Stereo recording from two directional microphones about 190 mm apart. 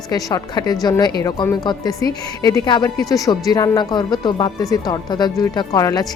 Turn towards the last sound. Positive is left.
turn(degrees=20)  # may be behind; listen again after turning